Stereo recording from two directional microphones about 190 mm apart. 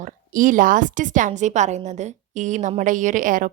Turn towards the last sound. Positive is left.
turn(degrees=-45)  # may be behind; listen again after turning